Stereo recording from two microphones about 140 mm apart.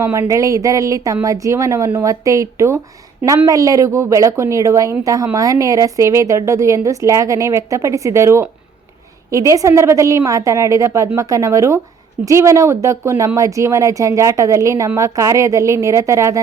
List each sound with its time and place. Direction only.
0.0 s a woman's voice: 20° right (ahead or behind)